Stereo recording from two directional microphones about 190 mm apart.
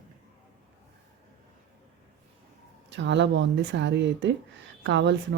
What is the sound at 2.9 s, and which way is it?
Speech, 70° right (ahead or behind).